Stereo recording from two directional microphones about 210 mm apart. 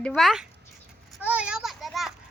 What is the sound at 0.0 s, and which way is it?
Speech, 5° left (ahead or behind).